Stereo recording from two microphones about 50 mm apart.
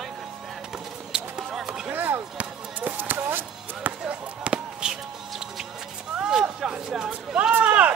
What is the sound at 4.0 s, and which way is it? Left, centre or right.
Basketball bounce, centre.